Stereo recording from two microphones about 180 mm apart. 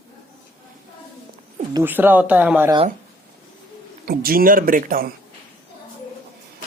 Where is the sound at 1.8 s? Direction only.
10° right (ahead or behind).